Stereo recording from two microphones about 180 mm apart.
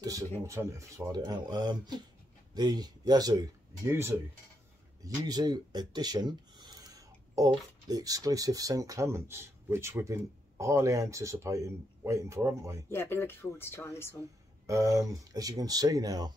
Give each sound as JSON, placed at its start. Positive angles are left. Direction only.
{"t": 0.5, "sound": "speech", "side_deg": -15}
{"t": 12.9, "sound": "speech", "side_deg": 15}
{"t": 14.7, "sound": "speech", "side_deg": -20}